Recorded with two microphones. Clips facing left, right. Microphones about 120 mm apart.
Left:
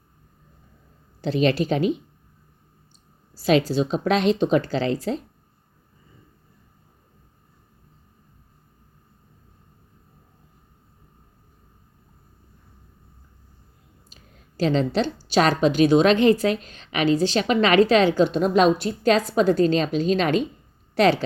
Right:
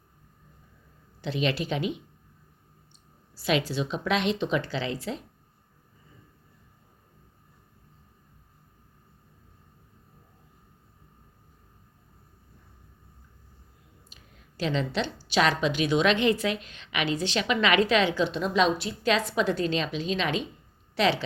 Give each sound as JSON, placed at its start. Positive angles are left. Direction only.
{"t": 1.2, "sound": "a woman's voice", "side_deg": 40}
{"t": 3.3, "sound": "a woman's voice", "side_deg": 40}
{"t": 14.1, "sound": "a woman's voice", "side_deg": 35}